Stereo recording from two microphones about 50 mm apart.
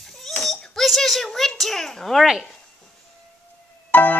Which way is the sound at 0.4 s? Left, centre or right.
Centre.